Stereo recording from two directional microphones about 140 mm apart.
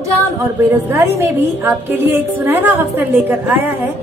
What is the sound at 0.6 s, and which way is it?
A woman's voice, 15° right (ahead or behind).